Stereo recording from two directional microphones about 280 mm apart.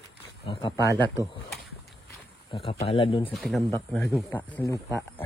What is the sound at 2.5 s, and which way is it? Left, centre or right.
Speech, centre.